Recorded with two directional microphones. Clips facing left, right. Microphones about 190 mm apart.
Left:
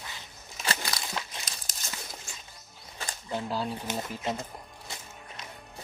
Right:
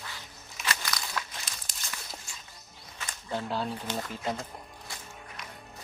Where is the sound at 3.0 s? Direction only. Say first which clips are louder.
Left 3 dB; 35° left (ahead or behind).